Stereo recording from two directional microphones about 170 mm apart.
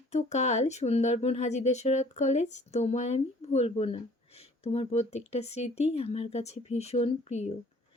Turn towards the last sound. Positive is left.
turn(degrees=40)  # may be behind; listen again after turning